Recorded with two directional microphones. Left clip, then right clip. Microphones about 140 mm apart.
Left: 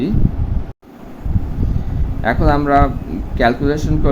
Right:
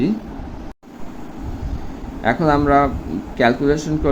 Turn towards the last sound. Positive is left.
turn(degrees=0)  # may be behind; listen again after turning